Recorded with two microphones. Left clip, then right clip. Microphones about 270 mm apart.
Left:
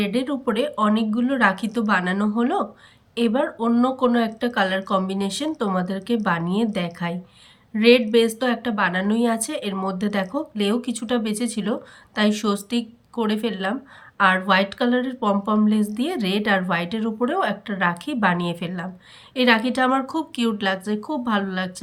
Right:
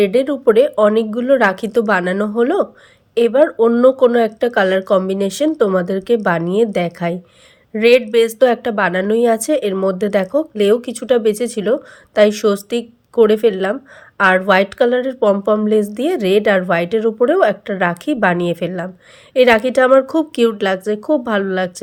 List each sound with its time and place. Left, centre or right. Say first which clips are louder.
0.0 s a woman's voice: right 11 dB; centre